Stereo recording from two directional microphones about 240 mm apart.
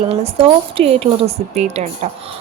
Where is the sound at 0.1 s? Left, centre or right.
Right.